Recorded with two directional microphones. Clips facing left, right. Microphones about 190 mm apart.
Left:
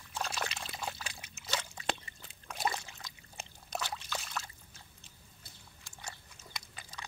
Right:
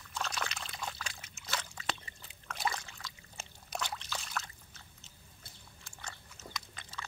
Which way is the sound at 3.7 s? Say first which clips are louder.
Left 1 dB; centre (ahead or behind).